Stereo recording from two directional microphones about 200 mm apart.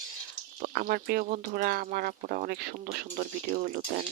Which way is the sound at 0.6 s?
50° right (ahead or behind).